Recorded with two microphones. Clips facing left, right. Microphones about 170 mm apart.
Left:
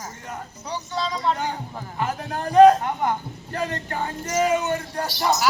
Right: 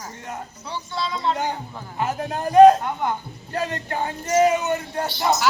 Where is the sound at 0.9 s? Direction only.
40° left (ahead or behind).